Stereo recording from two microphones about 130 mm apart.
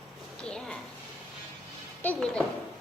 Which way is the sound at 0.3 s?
5° left (ahead or behind).